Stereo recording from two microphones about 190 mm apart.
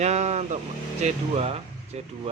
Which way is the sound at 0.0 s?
35° right (ahead or behind).